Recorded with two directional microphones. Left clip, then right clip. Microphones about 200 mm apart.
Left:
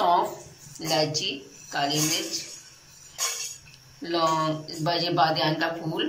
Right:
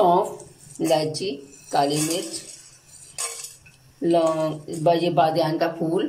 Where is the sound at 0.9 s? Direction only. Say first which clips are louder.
Right 2 dB; 55° right (ahead or behind).